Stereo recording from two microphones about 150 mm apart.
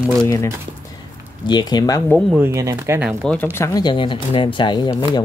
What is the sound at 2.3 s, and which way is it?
Speech, 15° right (ahead or behind).